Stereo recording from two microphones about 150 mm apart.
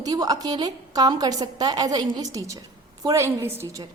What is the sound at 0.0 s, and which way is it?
A woman's voice, 25° right (ahead or behind).